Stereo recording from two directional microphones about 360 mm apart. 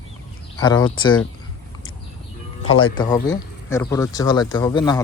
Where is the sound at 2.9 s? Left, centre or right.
Centre.